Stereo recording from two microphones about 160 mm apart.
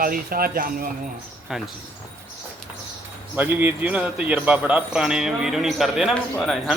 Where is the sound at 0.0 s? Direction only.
65° right (ahead or behind).